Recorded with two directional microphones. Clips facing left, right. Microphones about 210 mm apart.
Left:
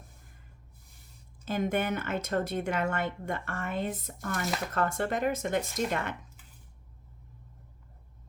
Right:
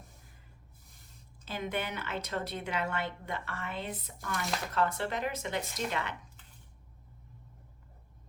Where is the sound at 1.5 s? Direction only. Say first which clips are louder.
Left 7 dB; 50° left (ahead or behind).